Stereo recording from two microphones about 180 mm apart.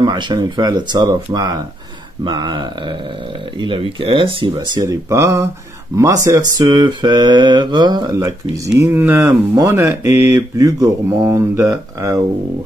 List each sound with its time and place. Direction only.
0.0 s speech: 25° right (ahead or behind)